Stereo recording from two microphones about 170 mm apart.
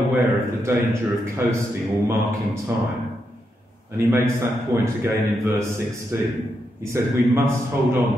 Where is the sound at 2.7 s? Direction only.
15° right (ahead or behind).